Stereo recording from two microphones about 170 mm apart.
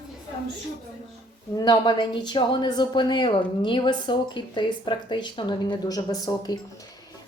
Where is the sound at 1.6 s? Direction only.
25° left (ahead or behind).